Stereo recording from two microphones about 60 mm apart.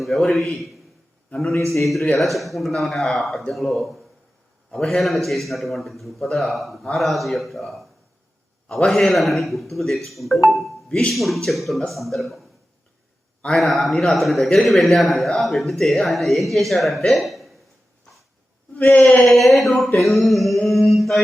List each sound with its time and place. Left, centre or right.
0.0 s a man's voice: centre
1.8 s a man's voice: centre
10.8 s speech: centre
11.1 s a man's voice: centre
13.5 s a man's voice: centre
18.8 s a man's voice: left
19.2 s a man's voice: centre
20.7 s mantra: centre